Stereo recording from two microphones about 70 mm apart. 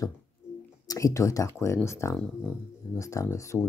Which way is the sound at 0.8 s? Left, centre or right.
Left.